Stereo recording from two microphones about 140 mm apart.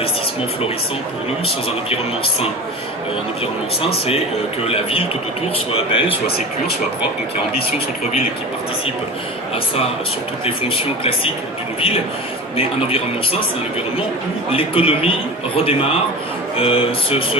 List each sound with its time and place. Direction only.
4.6 s speech: 45° left (ahead or behind)
11.8 s speech: 45° left (ahead or behind)
14.5 s speech: 40° left (ahead or behind)